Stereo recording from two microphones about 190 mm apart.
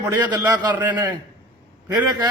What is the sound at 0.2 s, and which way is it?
Speech, 20° right (ahead or behind).